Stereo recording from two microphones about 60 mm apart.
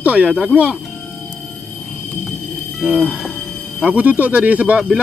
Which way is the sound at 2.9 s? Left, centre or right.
Centre.